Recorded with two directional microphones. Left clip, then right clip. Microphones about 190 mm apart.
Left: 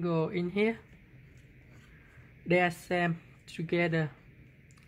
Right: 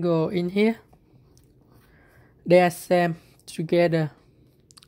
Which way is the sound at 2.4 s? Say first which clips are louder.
Right 10 dB; 35° right (ahead or behind).